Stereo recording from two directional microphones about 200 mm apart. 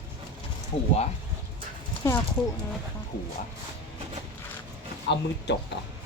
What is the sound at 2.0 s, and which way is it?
Speech, 15° left (ahead or behind).